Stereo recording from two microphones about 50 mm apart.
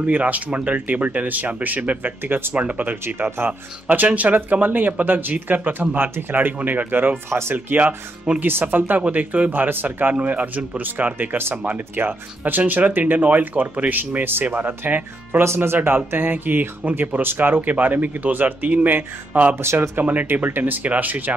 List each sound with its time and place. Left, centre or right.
0.0 s speech: right
2.2 s speech: right
2.5 s speech: right
3.2 s speech: right
3.9 s speech: right
7.2 s speech: right
7.5 s speech: right
8.4 s speech: right
9.5 s speech: right
11.3 s speech: right
15.4 s speech: right
19.6 s speech: right
20.0 s speech: right